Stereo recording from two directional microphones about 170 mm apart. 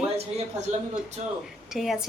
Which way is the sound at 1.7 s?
Centre (ahead or behind).